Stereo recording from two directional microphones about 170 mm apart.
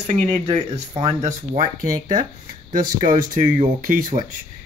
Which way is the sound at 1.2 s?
50° right (ahead or behind).